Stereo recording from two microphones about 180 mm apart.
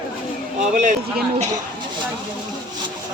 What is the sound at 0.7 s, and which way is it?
Speech, 45° right (ahead or behind).